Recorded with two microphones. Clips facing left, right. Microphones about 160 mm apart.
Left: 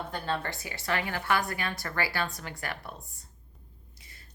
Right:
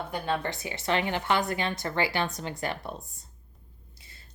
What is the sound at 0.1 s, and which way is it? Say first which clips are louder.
A woman's voice: right 4 dB; 20° right (ahead or behind).